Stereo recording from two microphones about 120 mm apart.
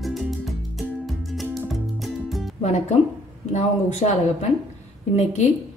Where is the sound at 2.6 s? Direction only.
70° left (ahead or behind).